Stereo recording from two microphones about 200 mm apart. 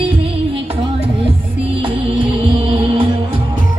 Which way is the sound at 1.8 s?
30° right (ahead or behind).